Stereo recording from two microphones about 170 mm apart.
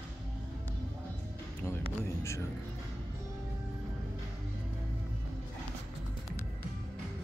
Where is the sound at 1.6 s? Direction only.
15° left (ahead or behind).